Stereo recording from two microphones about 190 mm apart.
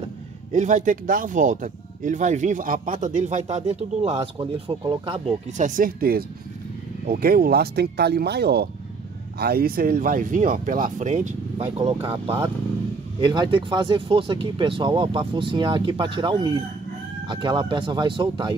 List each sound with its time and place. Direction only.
0.5 s speech: 40° right (ahead or behind); by 5.1 s 25° right (ahead or behind)
5.6 s speech: 45° right (ahead or behind); by 18.5 s 25° right (ahead or behind)